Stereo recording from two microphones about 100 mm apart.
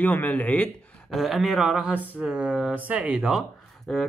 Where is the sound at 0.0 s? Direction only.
20° left (ahead or behind).